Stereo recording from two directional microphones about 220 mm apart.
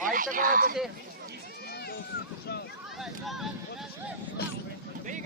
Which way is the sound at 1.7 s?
45° left (ahead or behind).